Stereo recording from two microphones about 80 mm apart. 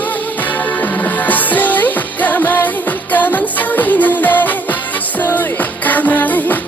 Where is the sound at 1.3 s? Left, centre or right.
Left.